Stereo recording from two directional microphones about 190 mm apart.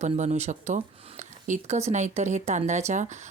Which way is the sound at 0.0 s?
35° right (ahead or behind).